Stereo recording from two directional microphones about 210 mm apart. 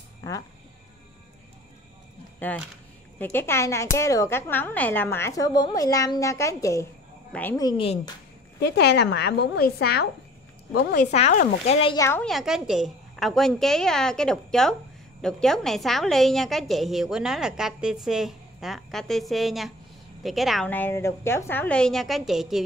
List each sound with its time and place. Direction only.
0.2 s a woman's voice: 15° left (ahead or behind)
2.4 s a woman's voice: 10° left (ahead or behind); by 8.1 s 25° left (ahead or behind)
8.5 s a woman's voice: 50° left (ahead or behind); by 12.0 s 30° left (ahead or behind)
12.0 s a woman's voice: 10° left (ahead or behind)
12.3 s a woman's voice: centre (ahead or behind)